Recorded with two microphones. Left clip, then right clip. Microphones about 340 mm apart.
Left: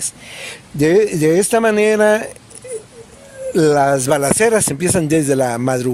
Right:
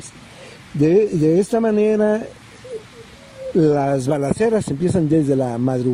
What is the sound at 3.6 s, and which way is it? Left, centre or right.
Speech, left.